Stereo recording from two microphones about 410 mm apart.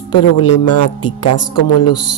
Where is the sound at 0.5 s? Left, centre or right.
Left.